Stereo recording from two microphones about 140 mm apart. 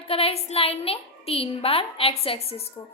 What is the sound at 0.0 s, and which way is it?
A woman's voice, 45° left (ahead or behind).